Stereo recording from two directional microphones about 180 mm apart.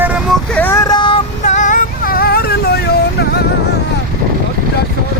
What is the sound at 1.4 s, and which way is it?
Music, 45° left (ahead or behind).